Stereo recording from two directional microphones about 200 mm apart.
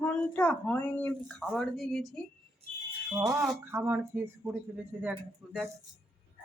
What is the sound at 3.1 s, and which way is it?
Speech, 15° right (ahead or behind).